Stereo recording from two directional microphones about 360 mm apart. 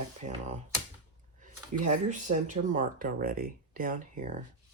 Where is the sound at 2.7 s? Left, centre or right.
Right.